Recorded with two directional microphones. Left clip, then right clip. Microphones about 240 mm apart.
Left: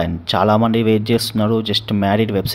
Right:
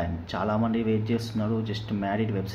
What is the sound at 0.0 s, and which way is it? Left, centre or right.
Speech, left.